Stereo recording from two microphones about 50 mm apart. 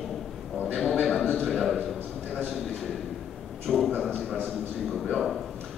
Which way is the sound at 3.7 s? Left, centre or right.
Centre.